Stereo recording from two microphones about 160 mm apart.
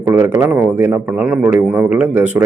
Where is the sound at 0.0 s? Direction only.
15° right (ahead or behind).